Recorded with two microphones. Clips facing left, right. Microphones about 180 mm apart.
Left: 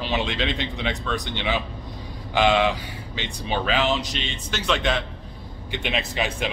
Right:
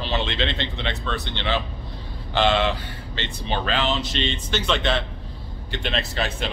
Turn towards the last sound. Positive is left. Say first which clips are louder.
# left 1 dB
turn(degrees=10)  # may be behind; listen again after turning